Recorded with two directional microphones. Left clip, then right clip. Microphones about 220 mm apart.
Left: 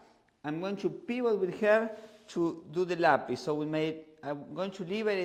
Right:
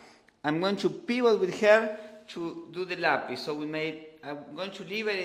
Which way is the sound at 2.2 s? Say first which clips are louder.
Left 6 dB; 50° left (ahead or behind).